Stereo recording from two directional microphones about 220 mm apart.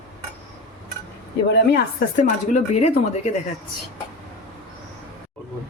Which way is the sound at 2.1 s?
35° left (ahead or behind).